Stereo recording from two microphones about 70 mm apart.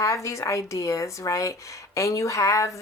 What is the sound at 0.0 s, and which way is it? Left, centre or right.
Speech, left.